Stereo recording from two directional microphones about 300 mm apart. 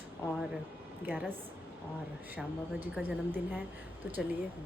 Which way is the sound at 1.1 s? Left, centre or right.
Centre.